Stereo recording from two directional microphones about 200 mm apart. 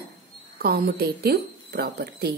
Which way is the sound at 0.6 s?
50° right (ahead or behind).